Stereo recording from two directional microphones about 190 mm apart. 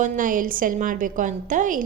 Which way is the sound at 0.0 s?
45° right (ahead or behind).